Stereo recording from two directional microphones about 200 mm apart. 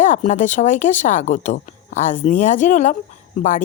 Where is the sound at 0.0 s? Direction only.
40° left (ahead or behind).